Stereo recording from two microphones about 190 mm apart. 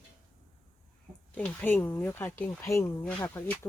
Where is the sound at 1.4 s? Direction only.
10° left (ahead or behind).